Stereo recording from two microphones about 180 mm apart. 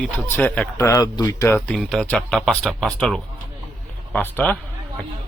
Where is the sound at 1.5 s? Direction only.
5° left (ahead or behind).